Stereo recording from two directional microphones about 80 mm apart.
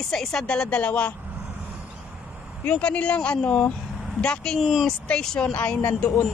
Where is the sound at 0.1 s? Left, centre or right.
Centre.